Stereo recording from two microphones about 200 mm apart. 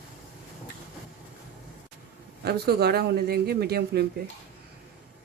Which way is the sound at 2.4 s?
50° right (ahead or behind).